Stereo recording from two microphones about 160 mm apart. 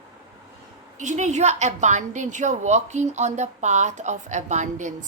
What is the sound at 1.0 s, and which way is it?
A woman's voice, 50° right (ahead or behind).